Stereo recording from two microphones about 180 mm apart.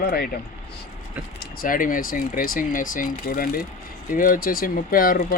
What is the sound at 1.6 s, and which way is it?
Speech, 50° left (ahead or behind).